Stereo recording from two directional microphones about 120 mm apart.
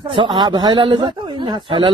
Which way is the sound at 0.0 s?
45° right (ahead or behind).